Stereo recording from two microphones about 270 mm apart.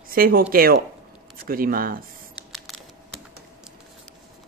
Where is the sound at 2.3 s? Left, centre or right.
Centre.